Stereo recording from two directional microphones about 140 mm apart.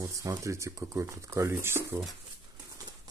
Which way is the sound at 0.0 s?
25° right (ahead or behind).